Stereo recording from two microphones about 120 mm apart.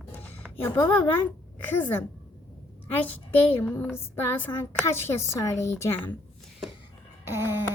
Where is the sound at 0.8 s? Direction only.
15° left (ahead or behind).